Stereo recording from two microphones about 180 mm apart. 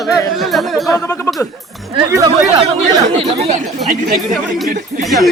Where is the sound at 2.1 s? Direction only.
15° right (ahead or behind).